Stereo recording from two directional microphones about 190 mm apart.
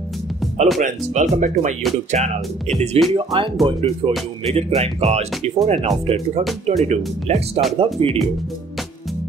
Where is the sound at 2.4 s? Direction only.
Centre (ahead or behind).